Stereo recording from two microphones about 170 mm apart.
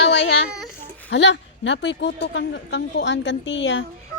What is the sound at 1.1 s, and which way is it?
A woman's voice, 90° left.